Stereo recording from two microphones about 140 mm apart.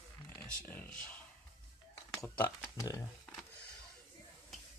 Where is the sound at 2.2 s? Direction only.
20° left (ahead or behind).